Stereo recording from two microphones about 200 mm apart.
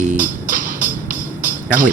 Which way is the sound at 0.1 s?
45° right (ahead or behind).